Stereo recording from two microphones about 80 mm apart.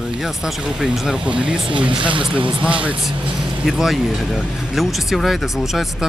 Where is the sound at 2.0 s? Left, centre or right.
Right.